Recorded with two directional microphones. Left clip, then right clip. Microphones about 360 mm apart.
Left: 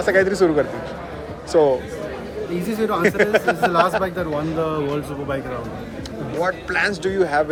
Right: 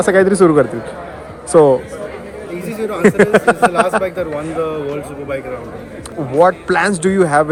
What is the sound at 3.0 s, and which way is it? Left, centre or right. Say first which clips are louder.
Speech: right 8 dB; centre.